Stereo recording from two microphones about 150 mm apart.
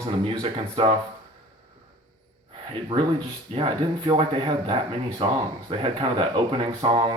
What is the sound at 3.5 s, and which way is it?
Speech, 40° right (ahead or behind).